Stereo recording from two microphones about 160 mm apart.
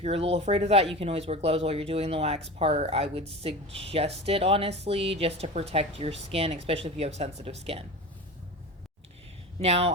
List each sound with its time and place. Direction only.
0.0 s speech: 40° right (ahead or behind)
9.6 s speech: 40° right (ahead or behind)